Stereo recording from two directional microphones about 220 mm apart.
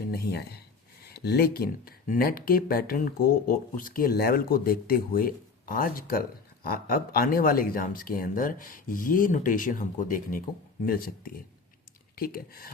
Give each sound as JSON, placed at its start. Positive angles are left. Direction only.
{"t": 0.1, "sound": "speech", "side_deg": 45}
{"t": 12.1, "sound": "speech", "side_deg": 40}